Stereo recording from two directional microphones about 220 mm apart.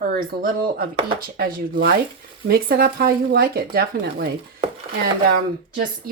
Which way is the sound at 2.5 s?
45° right (ahead or behind).